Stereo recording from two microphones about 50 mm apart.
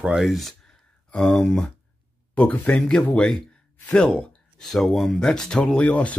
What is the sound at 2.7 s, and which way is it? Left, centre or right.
Speech, centre.